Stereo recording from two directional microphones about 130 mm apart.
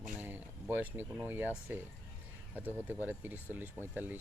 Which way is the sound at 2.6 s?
15° right (ahead or behind).